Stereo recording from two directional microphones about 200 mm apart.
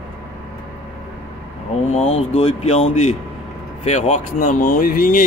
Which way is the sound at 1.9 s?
30° left (ahead or behind).